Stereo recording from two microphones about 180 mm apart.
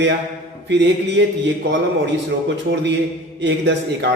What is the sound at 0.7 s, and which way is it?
Speech, 75° right (ahead or behind).